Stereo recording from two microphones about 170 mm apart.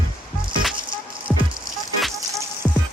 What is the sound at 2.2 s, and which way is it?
Music, 15° right (ahead or behind).